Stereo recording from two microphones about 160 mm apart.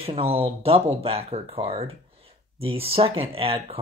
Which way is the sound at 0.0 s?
35° right (ahead or behind).